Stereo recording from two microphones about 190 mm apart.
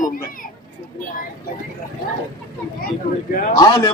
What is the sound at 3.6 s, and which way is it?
Speech, 20° left (ahead or behind).